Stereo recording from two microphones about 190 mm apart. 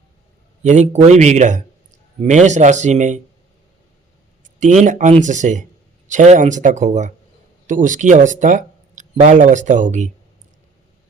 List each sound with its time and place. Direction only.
0.6 s speech: 40° right (ahead or behind)
4.8 s speech: 40° right (ahead or behind)